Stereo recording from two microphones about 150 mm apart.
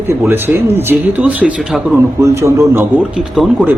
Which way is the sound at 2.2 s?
20° right (ahead or behind).